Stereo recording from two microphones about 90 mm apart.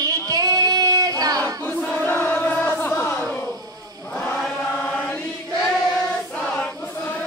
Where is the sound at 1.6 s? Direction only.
20° left (ahead or behind).